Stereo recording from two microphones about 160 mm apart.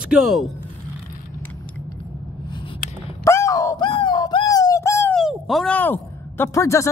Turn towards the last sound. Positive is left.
turn(degrees=20)  # may be behind; listen again after turning